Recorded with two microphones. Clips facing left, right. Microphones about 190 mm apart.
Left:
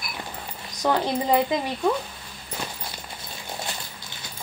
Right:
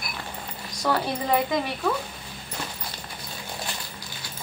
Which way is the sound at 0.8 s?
20° left (ahead or behind).